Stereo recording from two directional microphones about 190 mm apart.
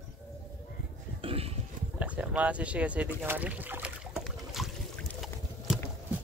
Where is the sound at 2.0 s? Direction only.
5° right (ahead or behind).